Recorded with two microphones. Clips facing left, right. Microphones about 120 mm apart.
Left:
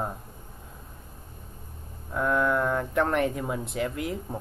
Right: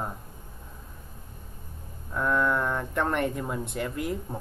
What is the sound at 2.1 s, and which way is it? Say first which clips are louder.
Speech: left 1 dB; 5° left (ahead or behind).